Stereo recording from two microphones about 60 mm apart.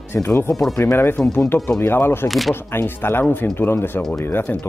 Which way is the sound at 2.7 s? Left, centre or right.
Left.